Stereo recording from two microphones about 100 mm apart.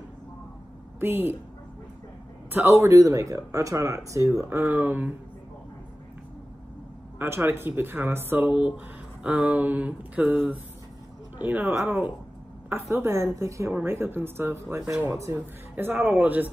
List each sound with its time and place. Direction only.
0.9 s a woman's voice: 20° right (ahead or behind)
2.5 s speech: 25° right (ahead or behind)
7.2 s speech: 25° right (ahead or behind)
13.0 s speech: 25° right (ahead or behind)
14.8 s speech: 5° right (ahead or behind)
15.0 s speech: 25° right (ahead or behind)